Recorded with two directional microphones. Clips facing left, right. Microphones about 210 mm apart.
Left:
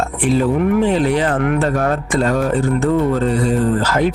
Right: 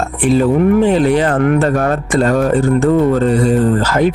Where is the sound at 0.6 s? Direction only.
40° right (ahead or behind).